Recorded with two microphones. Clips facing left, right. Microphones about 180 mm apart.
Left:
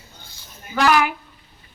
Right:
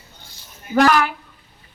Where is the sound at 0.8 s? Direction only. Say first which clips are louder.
Even; 5° left (ahead or behind).